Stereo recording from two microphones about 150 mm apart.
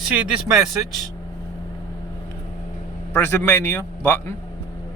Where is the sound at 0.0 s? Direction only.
5° right (ahead or behind).